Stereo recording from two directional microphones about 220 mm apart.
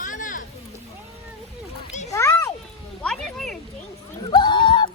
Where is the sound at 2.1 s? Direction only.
15° left (ahead or behind).